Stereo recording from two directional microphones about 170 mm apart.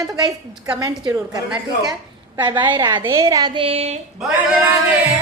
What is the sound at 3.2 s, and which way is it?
Speech, 25° right (ahead or behind).